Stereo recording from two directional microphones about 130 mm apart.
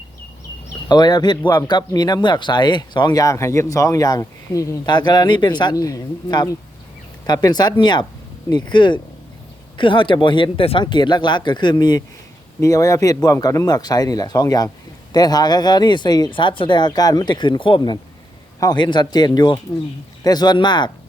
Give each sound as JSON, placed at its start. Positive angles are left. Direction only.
{"t": 0.9, "sound": "speech", "side_deg": 35}